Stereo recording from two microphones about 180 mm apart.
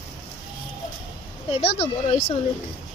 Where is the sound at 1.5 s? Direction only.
35° left (ahead or behind).